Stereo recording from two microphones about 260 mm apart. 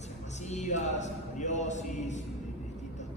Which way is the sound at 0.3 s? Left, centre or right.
Left.